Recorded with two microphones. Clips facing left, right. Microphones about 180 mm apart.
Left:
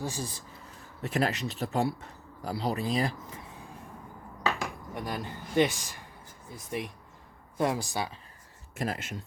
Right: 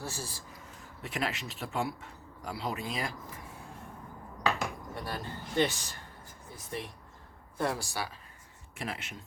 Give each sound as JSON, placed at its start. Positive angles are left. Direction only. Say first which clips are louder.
{"t": 0.0, "sound": "a man's voice", "louder": "left 5 dB", "side_deg": 15}
{"t": 1.0, "sound": "speech", "louder": "left 6 dB", "side_deg": 40}
{"t": 4.9, "sound": "a man's voice", "louder": "left 5 dB", "side_deg": 15}
{"t": 8.7, "sound": "speech", "louder": "left 6 dB", "side_deg": 40}